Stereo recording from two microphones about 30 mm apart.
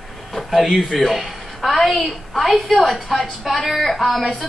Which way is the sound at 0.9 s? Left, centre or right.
Centre.